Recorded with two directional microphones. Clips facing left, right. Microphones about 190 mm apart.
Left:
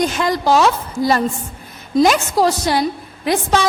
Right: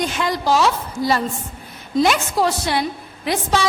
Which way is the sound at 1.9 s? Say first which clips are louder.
Left 4 dB; 40° left (ahead or behind).